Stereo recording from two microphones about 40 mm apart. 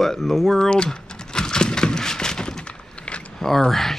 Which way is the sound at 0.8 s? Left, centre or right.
Centre.